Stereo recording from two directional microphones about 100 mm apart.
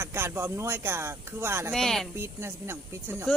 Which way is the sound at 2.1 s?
25° right (ahead or behind).